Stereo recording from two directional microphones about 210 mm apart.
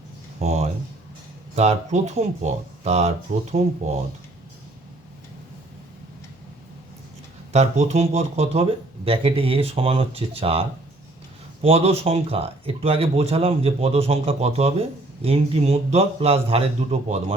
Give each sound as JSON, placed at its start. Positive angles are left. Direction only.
{"t": 0.3, "sound": "a sound", "side_deg": -30}
{"t": 1.5, "sound": "speech", "side_deg": -30}
{"t": 7.5, "sound": "speech", "side_deg": -30}